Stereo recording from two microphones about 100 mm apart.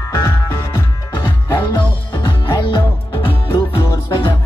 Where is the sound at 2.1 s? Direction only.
55° left (ahead or behind).